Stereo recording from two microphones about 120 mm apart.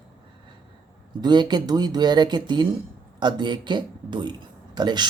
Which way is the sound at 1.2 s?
35° right (ahead or behind).